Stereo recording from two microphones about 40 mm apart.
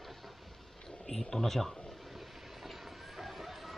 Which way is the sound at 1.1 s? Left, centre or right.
Centre.